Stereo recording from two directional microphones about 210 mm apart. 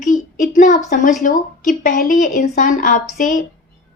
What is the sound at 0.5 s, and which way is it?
A woman's voice, 35° left (ahead or behind).